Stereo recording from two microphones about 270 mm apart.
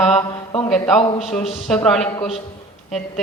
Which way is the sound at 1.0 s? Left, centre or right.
Left.